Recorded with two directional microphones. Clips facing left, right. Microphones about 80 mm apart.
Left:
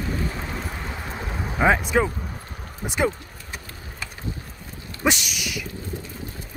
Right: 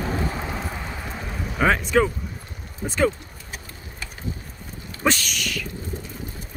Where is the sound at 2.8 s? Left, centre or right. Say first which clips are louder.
Right 2 dB; centre.